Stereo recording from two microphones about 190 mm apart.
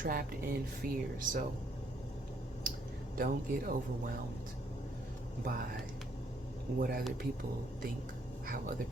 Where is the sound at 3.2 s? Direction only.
45° right (ahead or behind).